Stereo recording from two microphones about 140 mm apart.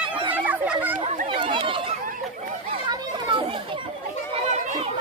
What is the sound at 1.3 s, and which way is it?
Chatter, 40° right (ahead or behind).